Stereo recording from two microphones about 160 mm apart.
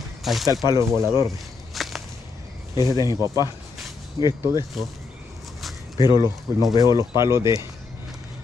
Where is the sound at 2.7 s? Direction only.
25° left (ahead or behind).